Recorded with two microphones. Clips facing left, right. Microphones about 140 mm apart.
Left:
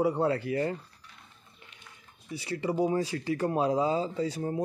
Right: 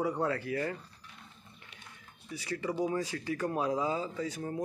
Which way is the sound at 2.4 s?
30° left (ahead or behind).